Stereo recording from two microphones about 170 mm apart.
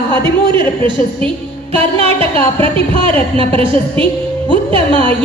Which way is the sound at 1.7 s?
35° right (ahead or behind).